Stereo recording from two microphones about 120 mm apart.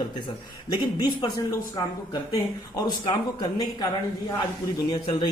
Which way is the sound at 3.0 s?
35° left (ahead or behind).